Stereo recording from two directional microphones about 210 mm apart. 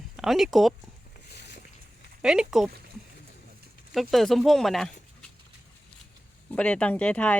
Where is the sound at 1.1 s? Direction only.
50° left (ahead or behind).